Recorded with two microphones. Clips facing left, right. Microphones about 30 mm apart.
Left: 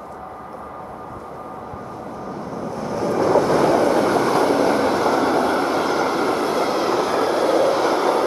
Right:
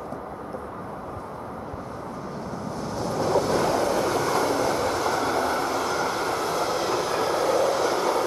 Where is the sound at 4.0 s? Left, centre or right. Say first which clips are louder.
Left 6 dB; left.